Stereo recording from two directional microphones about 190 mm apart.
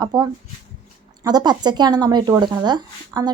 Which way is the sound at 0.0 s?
20° right (ahead or behind).